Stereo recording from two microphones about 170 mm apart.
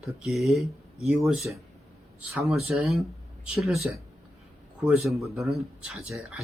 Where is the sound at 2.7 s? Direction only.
5° right (ahead or behind).